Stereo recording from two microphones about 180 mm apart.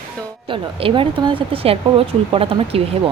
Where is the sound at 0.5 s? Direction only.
30° right (ahead or behind).